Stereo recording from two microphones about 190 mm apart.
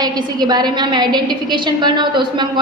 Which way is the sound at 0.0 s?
20° right (ahead or behind).